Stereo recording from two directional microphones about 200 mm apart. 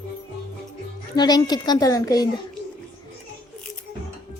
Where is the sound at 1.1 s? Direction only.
20° left (ahead or behind).